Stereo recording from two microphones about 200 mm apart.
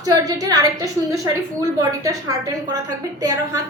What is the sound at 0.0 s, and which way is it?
A woman's voice, 20° right (ahead or behind).